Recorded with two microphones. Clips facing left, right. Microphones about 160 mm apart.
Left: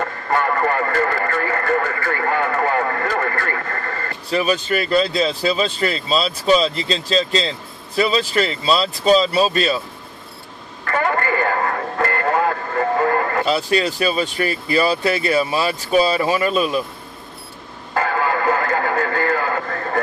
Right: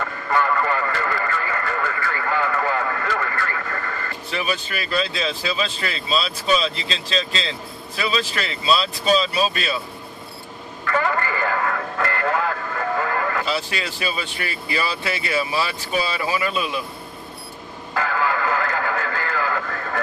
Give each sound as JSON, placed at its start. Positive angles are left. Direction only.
{"t": 0.0, "sound": "radio", "side_deg": 45}
{"t": 8.0, "sound": "speech", "side_deg": 35}
{"t": 10.9, "sound": "radio", "side_deg": 50}
{"t": 16.3, "sound": "speech", "side_deg": 40}
{"t": 17.9, "sound": "radio", "side_deg": 45}